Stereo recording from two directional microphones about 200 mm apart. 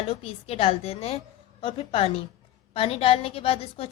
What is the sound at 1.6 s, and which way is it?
A woman's voice, 30° left (ahead or behind).